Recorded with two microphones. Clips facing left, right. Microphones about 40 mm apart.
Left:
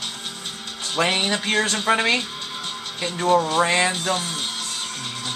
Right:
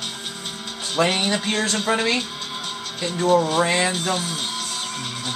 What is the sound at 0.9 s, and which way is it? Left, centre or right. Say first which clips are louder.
Speech: right 1 dB; centre.